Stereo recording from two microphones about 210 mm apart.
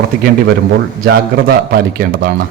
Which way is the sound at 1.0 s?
45° right (ahead or behind).